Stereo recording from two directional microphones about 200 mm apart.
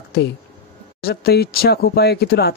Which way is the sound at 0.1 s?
55° left (ahead or behind).